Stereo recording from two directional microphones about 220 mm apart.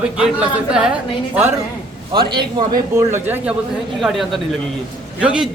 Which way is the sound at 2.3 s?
20° right (ahead or behind).